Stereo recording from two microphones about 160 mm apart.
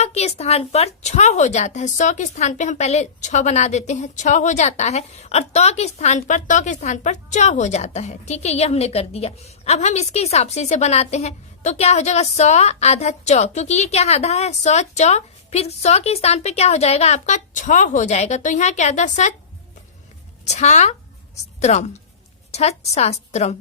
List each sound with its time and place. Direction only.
0.0 s a woman's voice: 40° left (ahead or behind)
20.4 s a woman's voice: 45° left (ahead or behind)